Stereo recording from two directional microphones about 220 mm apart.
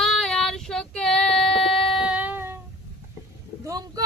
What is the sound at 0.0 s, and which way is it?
Child singing, centre (ahead or behind).